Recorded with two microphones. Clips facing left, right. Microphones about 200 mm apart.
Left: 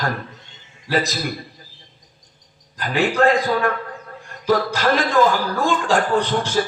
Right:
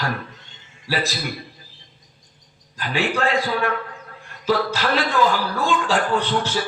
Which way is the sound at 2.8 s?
45° left (ahead or behind).